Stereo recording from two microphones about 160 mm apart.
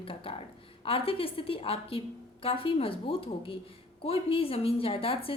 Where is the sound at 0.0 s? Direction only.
35° left (ahead or behind).